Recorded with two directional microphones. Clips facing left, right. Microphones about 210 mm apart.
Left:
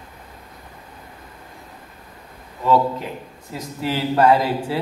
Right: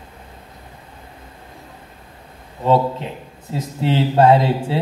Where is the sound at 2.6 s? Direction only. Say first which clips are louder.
Right 1 dB; 25° right (ahead or behind).